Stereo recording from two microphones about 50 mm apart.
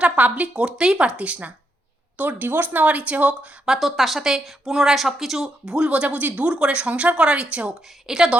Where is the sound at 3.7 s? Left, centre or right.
Centre; by 7.7 s right.